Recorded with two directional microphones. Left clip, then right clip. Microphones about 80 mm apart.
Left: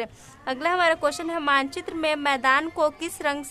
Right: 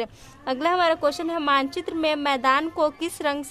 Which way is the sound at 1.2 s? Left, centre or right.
Right.